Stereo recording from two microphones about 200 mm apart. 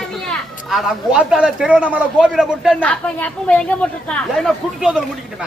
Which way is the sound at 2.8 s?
5° left (ahead or behind).